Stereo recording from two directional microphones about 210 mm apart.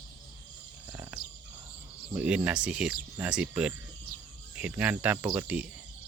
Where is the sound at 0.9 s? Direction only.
10° right (ahead or behind).